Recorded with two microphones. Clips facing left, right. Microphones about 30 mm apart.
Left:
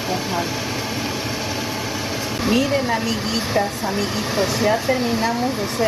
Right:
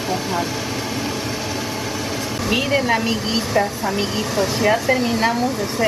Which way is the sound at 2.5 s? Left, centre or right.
Centre.